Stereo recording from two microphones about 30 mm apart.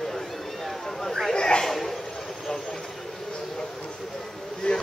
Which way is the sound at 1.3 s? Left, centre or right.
Left.